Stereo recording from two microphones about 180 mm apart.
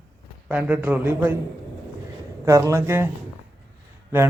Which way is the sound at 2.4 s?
15° right (ahead or behind).